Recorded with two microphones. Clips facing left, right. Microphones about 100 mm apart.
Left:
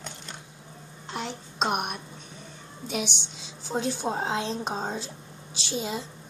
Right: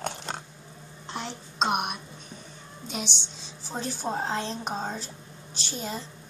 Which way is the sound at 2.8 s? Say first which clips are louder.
Left 4 dB; 10° left (ahead or behind).